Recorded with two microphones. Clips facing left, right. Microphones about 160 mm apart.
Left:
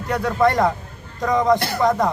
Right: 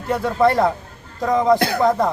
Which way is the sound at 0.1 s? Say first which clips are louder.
Right 2 dB; 5° right (ahead or behind).